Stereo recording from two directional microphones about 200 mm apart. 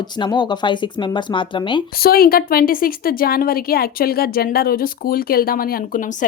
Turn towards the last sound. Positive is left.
turn(degrees=45)  # may be behind; listen again after turning